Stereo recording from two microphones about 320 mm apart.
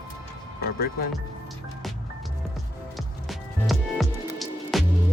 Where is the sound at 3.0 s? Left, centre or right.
Centre.